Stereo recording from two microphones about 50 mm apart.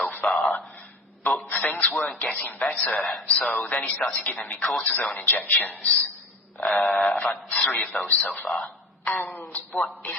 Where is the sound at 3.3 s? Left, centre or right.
Left.